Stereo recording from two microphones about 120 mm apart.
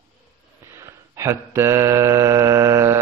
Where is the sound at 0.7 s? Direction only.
25° right (ahead or behind).